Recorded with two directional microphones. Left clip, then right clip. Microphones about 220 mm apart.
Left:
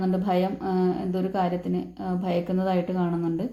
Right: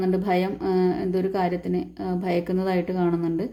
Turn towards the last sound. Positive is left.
turn(degrees=-35)  # may be behind; listen again after turning